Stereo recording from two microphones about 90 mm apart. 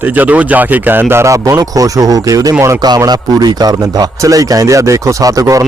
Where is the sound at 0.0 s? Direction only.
15° right (ahead or behind); by 2.7 s 35° right (ahead or behind).